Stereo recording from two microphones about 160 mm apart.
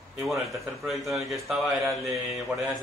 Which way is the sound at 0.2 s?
Centre (ahead or behind).